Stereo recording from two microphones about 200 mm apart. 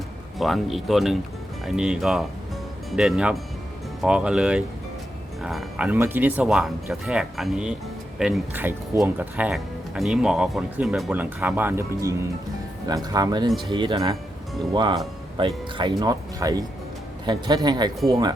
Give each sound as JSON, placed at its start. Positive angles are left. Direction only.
{"t": 0.3, "sound": "speech", "side_deg": 0}